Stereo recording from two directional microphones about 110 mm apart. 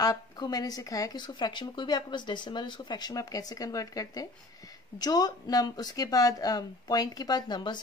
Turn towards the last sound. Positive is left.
turn(degrees=45)  # may be behind; listen again after turning